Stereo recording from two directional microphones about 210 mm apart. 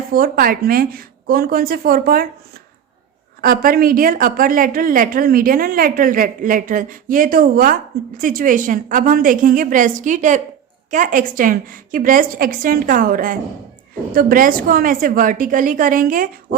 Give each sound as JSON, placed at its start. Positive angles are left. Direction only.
{"t": 0.1, "sound": "speech", "side_deg": -40}
{"t": 3.4, "sound": "a woman's voice", "side_deg": -40}